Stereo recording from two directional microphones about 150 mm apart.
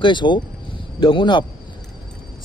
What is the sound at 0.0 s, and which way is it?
Speech, 30° left (ahead or behind).